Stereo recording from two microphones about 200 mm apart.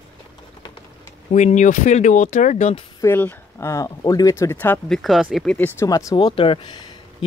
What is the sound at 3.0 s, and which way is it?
Speech, 10° left (ahead or behind).